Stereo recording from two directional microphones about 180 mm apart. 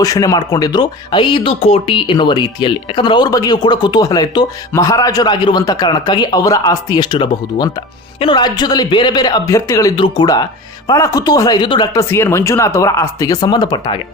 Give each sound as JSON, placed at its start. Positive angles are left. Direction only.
{"t": 0.0, "sound": "speech", "side_deg": 20}
{"t": 12.0, "sound": "speech", "side_deg": 15}